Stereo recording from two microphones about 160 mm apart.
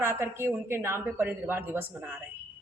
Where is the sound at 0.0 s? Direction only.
15° right (ahead or behind).